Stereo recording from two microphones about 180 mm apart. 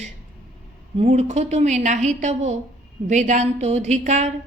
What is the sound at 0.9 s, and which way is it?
Speech, 35° right (ahead or behind).